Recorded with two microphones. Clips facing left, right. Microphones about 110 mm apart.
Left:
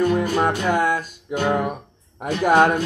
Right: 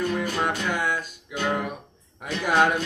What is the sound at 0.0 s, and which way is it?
Music, 45° left (ahead or behind).